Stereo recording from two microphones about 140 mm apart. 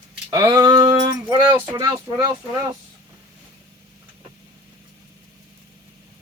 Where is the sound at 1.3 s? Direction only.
35° right (ahead or behind).